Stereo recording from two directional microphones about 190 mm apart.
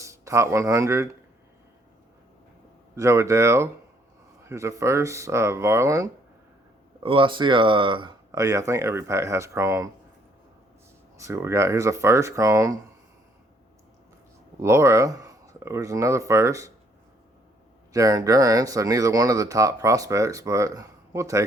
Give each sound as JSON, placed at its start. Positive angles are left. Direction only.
{"t": 0.0, "sound": "speech", "side_deg": -15}
{"t": 2.9, "sound": "speech", "side_deg": -15}
{"t": 7.0, "sound": "speech", "side_deg": -25}
{"t": 11.2, "sound": "speech", "side_deg": -15}
{"t": 14.6, "sound": "speech", "side_deg": -15}
{"t": 17.9, "sound": "speech", "side_deg": -20}